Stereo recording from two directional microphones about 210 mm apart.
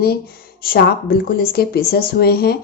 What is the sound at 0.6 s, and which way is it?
Speech, 45° left (ahead or behind).